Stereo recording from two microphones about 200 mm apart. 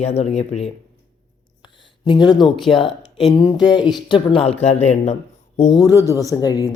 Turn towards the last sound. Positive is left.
turn(degrees=20)  # may be behind; listen again after turning